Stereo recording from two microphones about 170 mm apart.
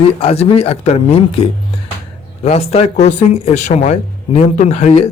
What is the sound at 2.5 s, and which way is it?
Speech, 35° left (ahead or behind).